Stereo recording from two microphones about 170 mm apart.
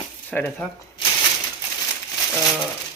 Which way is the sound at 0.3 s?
10° left (ahead or behind).